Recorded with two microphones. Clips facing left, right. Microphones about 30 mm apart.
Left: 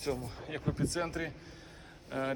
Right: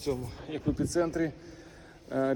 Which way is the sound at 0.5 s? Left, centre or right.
Left.